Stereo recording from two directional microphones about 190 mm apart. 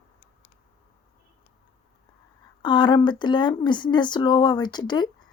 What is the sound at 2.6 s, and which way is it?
Speech, 25° left (ahead or behind).